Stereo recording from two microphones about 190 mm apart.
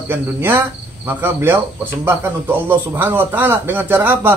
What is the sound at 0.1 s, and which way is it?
Speech, 10° right (ahead or behind).